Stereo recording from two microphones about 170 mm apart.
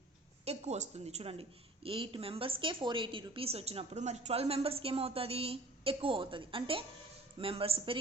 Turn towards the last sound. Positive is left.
turn(degrees=-35)  # may be behind; listen again after turning